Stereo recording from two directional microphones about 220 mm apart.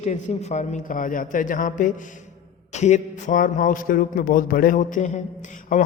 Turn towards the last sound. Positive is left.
turn(degrees=35)  # may be behind; listen again after turning